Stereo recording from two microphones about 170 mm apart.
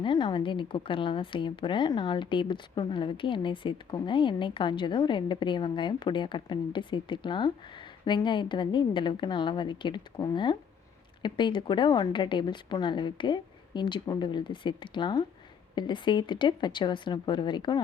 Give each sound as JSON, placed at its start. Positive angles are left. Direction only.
{"t": 0.0, "sound": "speech", "side_deg": 25}